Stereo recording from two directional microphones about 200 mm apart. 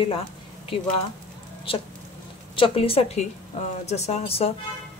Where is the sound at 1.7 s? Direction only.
30° left (ahead or behind).